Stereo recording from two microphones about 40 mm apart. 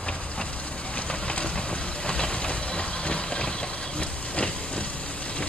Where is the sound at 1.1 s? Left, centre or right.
Left.